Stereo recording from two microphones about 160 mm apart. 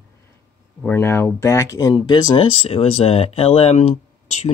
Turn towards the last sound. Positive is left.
turn(degrees=40)  # may be behind; listen again after turning